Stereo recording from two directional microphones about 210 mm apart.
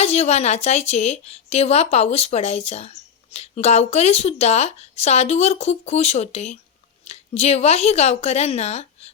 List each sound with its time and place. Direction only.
0.0 s a woman's voice: 30° left (ahead or behind)